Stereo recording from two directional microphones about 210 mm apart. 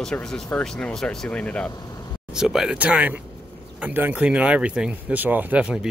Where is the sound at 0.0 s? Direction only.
5° left (ahead or behind).